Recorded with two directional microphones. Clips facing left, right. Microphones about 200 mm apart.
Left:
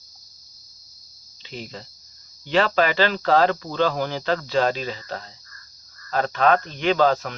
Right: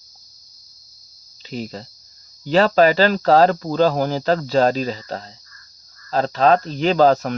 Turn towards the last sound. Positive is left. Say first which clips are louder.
# right 4 dB
turn(degrees=-40)  # may be behind; listen again after turning